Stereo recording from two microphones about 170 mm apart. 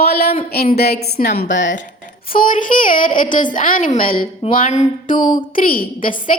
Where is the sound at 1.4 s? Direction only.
50° left (ahead or behind).